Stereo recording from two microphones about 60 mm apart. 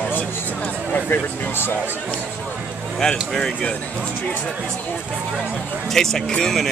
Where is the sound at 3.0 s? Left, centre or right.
Centre.